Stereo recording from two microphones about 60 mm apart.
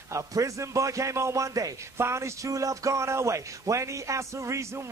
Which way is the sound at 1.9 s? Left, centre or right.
Right.